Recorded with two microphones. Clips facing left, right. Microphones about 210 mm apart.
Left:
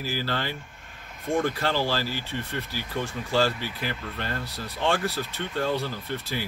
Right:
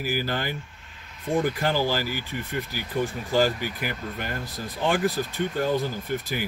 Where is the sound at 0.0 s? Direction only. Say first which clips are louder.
Right 2 dB; 15° right (ahead or behind).